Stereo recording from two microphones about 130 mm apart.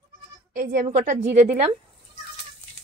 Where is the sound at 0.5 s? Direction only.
90° right; by 1.5 s 65° right (ahead or behind).